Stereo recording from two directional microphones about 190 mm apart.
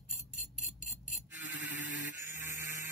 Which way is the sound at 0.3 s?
45° left (ahead or behind).